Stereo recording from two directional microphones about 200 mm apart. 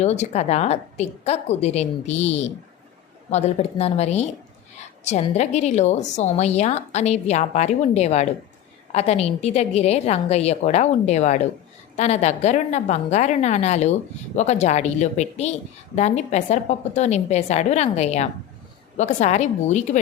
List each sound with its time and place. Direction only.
0.0 s a woman's voice: 35° left (ahead or behind)